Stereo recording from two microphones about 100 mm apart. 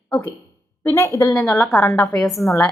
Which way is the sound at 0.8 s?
30° left (ahead or behind).